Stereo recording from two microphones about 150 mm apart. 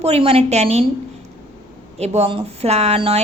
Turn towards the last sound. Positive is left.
turn(degrees=-40)  # may be behind; listen again after turning